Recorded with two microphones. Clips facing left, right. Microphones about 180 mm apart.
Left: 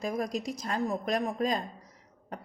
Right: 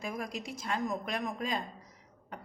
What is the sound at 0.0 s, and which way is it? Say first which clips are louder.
A woman's voice: left 6 dB; 40° left (ahead or behind).